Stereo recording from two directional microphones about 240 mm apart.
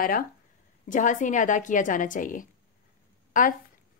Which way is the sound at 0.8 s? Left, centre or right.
Left.